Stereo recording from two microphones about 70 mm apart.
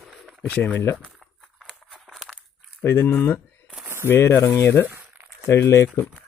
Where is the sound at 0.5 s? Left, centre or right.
Left.